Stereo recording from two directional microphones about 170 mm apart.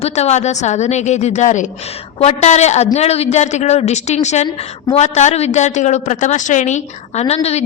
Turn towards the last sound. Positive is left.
turn(degrees=40)  # may be behind; listen again after turning